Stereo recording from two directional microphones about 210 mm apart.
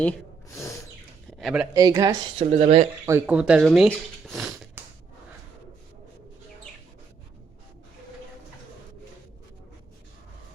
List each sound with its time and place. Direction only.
1.4 s speech: centre (ahead or behind)
1.7 s speech: 15° right (ahead or behind)
2.5 s speech: 30° right (ahead or behind)
3.1 s speech: 5° right (ahead or behind)